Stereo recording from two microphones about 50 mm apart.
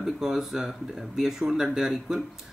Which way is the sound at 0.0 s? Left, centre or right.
Centre.